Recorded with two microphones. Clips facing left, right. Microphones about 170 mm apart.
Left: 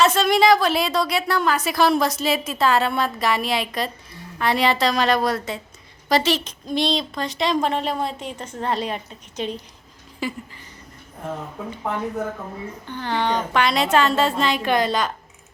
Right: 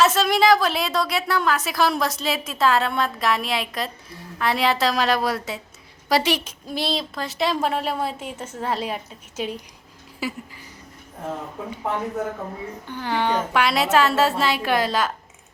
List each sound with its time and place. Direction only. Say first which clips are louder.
0.0 s a woman's voice: left 1 dB; centre (ahead or behind)
12.9 s a woman's voice: even; 10° right (ahead or behind)